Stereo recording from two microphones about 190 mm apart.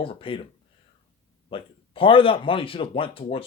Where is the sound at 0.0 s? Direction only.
30° left (ahead or behind).